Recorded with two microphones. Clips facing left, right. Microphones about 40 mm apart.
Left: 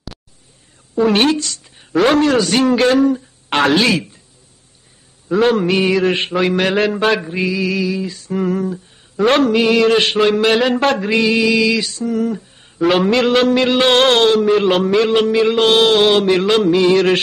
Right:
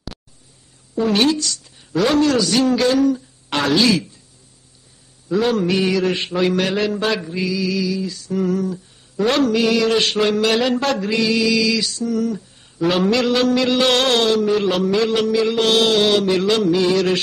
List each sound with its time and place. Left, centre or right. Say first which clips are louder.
1.0 s a woman's voice: left 3 dB; left
5.4 s a woman's voice: left 4 dB; left
6.3 s a sound: left 3 dB; left
7.2 s a woman's voice: left 3 dB; left
10.2 s a sound: left 4 dB; left
10.9 s a woman's voice: left 4 dB; left